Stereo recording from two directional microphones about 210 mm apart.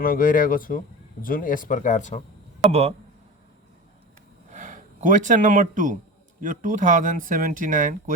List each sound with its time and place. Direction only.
0.0 s speech: 45° left (ahead or behind)
2.6 s speech: 30° right (ahead or behind)
4.5 s speech: 40° right (ahead or behind)